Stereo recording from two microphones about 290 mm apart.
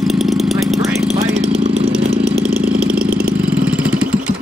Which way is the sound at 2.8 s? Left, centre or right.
Centre.